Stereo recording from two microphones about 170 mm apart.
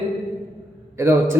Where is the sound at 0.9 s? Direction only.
15° right (ahead or behind).